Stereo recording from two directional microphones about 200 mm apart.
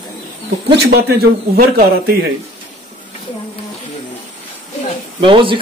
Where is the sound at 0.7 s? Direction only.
55° right (ahead or behind).